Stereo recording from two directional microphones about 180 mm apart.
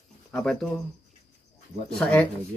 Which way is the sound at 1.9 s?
5° left (ahead or behind).